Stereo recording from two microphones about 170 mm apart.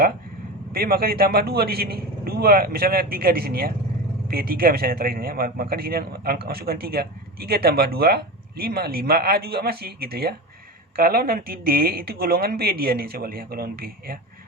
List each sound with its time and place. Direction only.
0.7 s speech: 60° right (ahead or behind)